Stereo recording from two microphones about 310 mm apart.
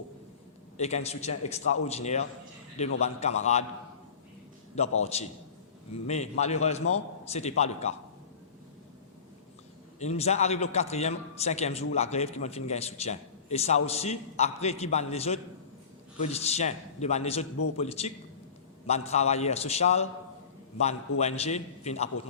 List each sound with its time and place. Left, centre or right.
0.8 s a man's voice: left
4.8 s a man's voice: centre
10.0 s a man's voice: left